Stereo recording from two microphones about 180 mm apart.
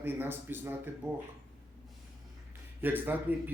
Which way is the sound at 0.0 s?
10° right (ahead or behind).